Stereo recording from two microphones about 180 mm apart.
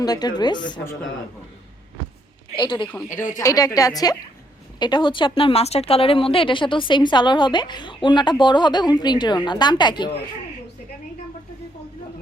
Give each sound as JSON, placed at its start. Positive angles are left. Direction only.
{"t": 0.0, "sound": "speech", "side_deg": 20}
{"t": 2.6, "sound": "speech", "side_deg": 25}